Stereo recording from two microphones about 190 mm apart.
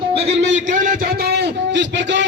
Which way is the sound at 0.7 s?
45° right (ahead or behind).